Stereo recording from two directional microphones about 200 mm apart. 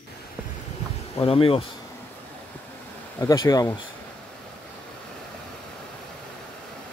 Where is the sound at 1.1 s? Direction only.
30° left (ahead or behind).